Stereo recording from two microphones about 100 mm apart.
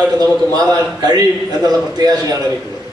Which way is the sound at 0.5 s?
40° right (ahead or behind).